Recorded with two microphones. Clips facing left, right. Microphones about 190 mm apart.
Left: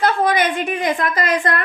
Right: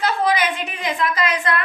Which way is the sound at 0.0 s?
55° left (ahead or behind).